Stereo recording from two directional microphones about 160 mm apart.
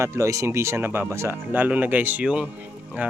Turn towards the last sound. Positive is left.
turn(degrees=-10)  # may be behind; listen again after turning